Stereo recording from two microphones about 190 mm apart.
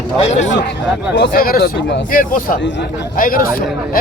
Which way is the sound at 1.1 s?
55° left (ahead or behind).